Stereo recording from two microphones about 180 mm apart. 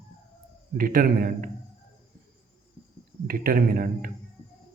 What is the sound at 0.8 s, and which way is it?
Speech, 55° right (ahead or behind).